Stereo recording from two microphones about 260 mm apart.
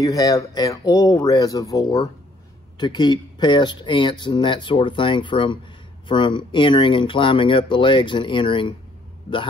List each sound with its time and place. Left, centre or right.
0.0 s speech: centre